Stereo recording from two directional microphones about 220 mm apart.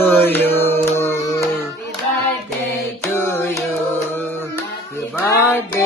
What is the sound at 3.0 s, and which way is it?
Mantra, 10° left (ahead or behind).